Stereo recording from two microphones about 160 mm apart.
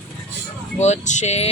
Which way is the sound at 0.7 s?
45° left (ahead or behind).